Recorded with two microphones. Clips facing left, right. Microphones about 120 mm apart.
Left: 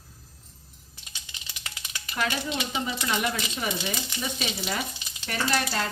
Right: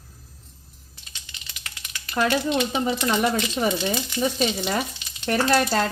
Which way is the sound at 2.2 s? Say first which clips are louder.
Right 8 dB; 50° right (ahead or behind).